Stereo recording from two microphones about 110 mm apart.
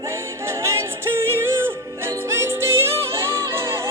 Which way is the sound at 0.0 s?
25° right (ahead or behind).